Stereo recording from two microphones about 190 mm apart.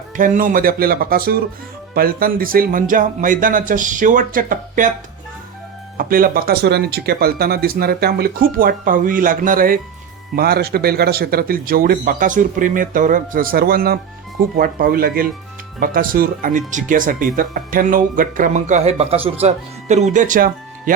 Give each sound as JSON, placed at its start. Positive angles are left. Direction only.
{"t": 0.2, "sound": "speech", "side_deg": -45}
{"t": 6.0, "sound": "speech", "side_deg": -50}